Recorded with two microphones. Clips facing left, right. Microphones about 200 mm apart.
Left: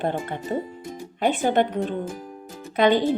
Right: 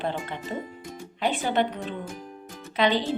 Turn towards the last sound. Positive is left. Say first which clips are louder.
# left 5 dB
turn(degrees=50)  # may be behind; listen again after turning